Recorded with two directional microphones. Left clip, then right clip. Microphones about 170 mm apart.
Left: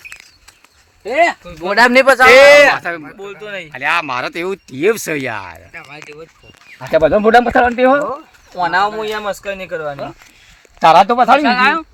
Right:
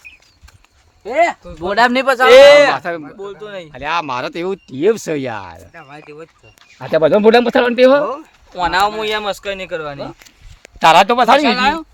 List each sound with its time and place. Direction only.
1.0 s speech: 10° left (ahead or behind)
1.5 s speech: 20° left (ahead or behind)
1.8 s a man's voice: 30° left (ahead or behind)
2.2 s speech: 20° left (ahead or behind)
2.7 s speech: 50° right (ahead or behind)
3.2 s speech: 15° right (ahead or behind)
3.7 s speech: 50° right (ahead or behind)
4.4 s speech: 20° right (ahead or behind)
5.7 s speech: 5° right (ahead or behind)
6.7 s speech: 25° right (ahead or behind)
7.5 s speech: 40° right (ahead or behind)
8.5 s speech: 10° right (ahead or behind)
10.8 s speech: 5° left (ahead or behind)
11.4 s speech: 90° right